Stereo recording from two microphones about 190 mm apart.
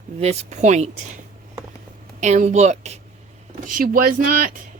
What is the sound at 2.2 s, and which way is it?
Speech, 40° right (ahead or behind).